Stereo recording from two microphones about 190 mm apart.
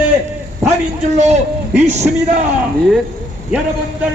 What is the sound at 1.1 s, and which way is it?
Speech, 35° right (ahead or behind).